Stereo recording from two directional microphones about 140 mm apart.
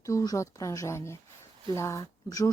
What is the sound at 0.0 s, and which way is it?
Speech, 25° left (ahead or behind).